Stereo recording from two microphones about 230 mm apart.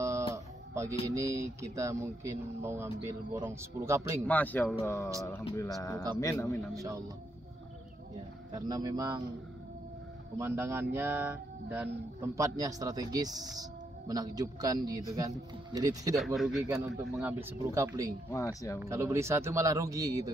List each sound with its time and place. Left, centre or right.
0.3 s a sound: centre
1.1 s speech: centre
4.3 s speech: centre
6.7 s speech: centre
8.5 s speech: centre
10.3 s speech: centre
12.4 s speech: centre
16.3 s a man's voice: centre
16.6 s speech: centre
18.3 s speech: centre
18.8 s speech: centre